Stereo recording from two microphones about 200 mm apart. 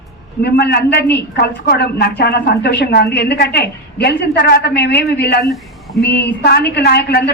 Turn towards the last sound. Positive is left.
turn(degrees=55)  # may be behind; listen again after turning